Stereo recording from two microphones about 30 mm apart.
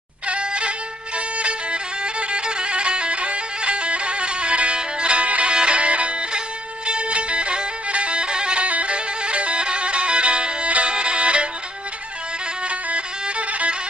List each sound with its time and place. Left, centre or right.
0.3 s music: right
5.5 s music: right
8.6 s music: right
12.6 s music: right